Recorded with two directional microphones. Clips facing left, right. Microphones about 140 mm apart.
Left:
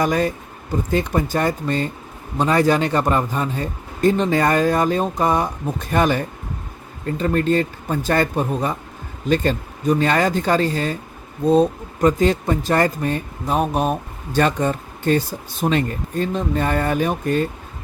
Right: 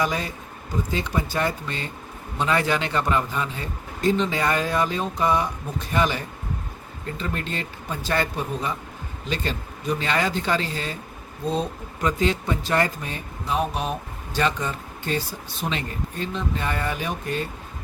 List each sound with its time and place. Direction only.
0.0 s speech: 50° left (ahead or behind)